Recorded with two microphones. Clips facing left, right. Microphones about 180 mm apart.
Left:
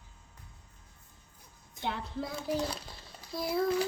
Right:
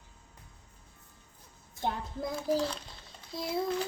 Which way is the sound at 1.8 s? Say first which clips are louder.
Right 2 dB; 45° right (ahead or behind).